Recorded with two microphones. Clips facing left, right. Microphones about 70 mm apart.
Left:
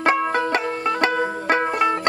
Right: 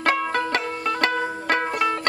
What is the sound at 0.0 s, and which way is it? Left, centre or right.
Banjo, centre.